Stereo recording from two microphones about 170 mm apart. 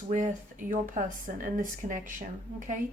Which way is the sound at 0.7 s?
50° right (ahead or behind).